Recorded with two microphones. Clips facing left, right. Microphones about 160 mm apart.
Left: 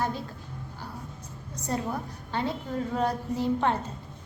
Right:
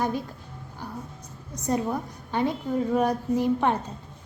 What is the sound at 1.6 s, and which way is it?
A woman's voice, 15° right (ahead or behind).